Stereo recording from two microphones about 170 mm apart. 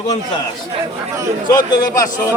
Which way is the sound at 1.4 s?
25° left (ahead or behind).